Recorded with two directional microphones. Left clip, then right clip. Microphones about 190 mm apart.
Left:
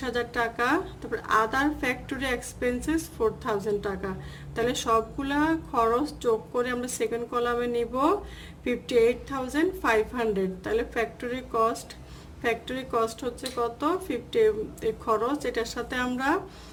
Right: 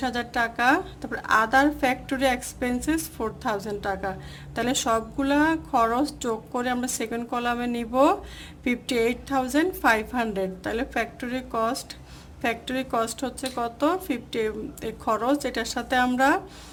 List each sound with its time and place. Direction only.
0.0 s a woman's voice: 30° right (ahead or behind)